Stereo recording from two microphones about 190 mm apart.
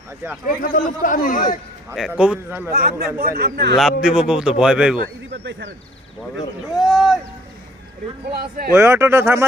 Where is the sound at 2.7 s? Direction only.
55° right (ahead or behind).